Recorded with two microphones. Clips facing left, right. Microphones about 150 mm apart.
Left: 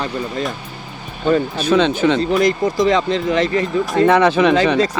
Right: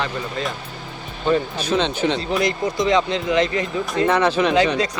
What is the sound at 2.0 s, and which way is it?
Speech, 90° left.